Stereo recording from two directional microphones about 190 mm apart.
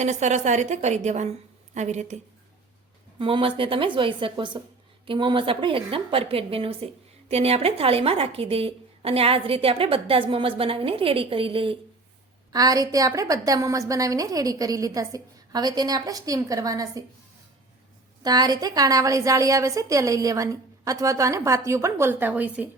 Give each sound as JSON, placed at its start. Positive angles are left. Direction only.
{"t": 0.0, "sound": "a woman's voice", "side_deg": -40}
{"t": 3.2, "sound": "a woman's voice", "side_deg": -30}
{"t": 18.2, "sound": "a woman's voice", "side_deg": -20}